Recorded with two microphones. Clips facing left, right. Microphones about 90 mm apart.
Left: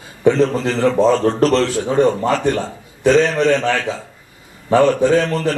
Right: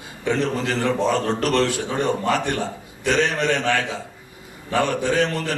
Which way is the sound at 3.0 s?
25° left (ahead or behind).